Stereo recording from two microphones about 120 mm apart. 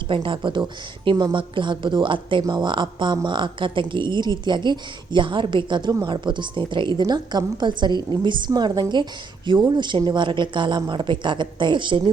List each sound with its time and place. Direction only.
0.1 s a woman's voice: 45° right (ahead or behind)